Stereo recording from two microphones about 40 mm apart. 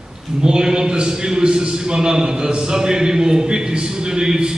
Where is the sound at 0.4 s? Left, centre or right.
Centre.